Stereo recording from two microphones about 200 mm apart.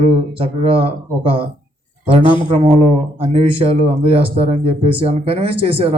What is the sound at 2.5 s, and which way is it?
Speech, 30° right (ahead or behind).